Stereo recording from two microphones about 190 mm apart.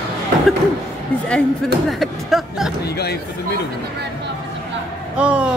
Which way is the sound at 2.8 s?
60° left (ahead or behind).